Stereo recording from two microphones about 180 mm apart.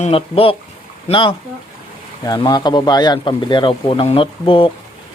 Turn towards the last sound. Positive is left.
turn(degrees=30)  # may be behind; listen again after turning